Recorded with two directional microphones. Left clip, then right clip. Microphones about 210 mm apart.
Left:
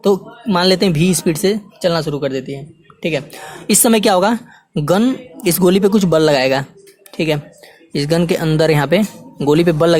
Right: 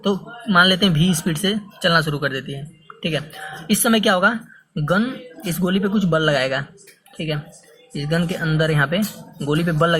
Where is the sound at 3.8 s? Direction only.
35° left (ahead or behind).